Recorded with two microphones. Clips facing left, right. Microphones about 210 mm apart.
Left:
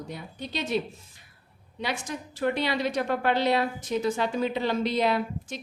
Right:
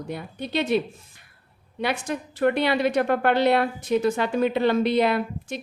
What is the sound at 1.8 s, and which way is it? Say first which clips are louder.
A woman's voice: right 5 dB; 60° right (ahead or behind).